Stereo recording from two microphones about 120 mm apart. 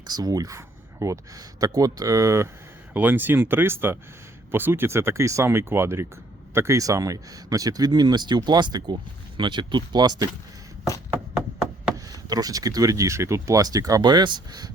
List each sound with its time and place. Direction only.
0.1 s speech: 30° right (ahead or behind)
12.1 s speech: 30° right (ahead or behind)